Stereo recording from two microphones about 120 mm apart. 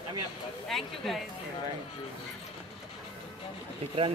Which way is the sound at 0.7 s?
Centre (ahead or behind).